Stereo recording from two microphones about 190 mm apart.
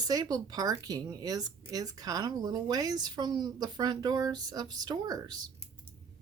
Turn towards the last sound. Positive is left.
turn(degrees=-20)  # may be behind; listen again after turning